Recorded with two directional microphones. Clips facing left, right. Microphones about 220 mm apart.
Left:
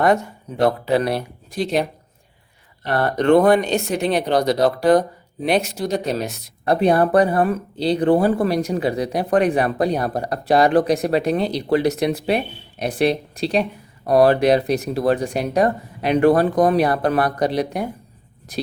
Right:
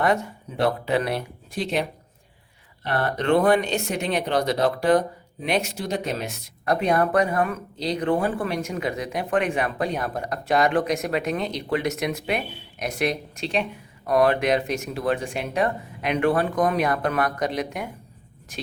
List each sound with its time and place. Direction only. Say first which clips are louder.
0.9 s speech: left 4 dB; 35° left (ahead or behind)
2.8 s speech: left 6 dB; 40° left (ahead or behind)